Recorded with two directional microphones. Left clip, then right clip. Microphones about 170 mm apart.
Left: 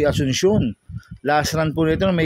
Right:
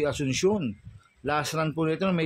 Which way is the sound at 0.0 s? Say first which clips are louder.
Left 7 dB; 40° left (ahead or behind).